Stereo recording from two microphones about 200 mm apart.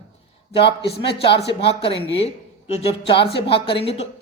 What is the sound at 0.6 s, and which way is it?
Speech, 55° left (ahead or behind).